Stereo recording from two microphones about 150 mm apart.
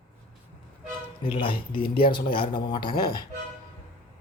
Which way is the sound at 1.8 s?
85° left.